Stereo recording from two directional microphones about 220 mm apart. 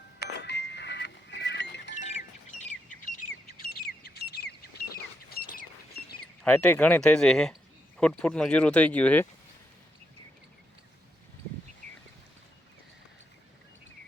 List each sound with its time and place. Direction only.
0.3 s music: 50° left (ahead or behind)
2.0 s bird: 30° left (ahead or behind)
6.4 s speech: 5° left (ahead or behind)